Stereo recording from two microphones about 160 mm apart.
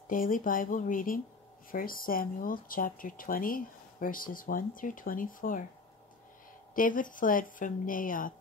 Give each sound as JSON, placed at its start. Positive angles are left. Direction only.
{"t": 0.1, "sound": "speech", "side_deg": 60}
{"t": 6.7, "sound": "speech", "side_deg": 55}